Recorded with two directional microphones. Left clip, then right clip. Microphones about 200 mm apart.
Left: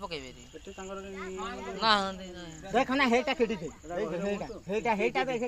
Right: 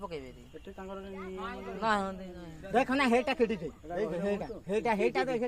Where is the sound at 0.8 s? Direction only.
20° left (ahead or behind).